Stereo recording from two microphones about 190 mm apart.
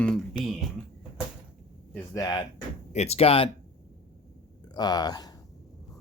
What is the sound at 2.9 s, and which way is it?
Speech, 35° left (ahead or behind).